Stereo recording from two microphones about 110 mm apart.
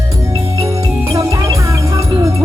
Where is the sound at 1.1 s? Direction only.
30° right (ahead or behind).